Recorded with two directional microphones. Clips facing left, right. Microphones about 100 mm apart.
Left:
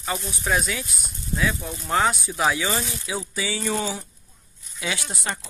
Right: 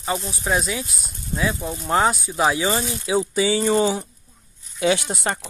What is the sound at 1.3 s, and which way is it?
Speech, 20° right (ahead or behind).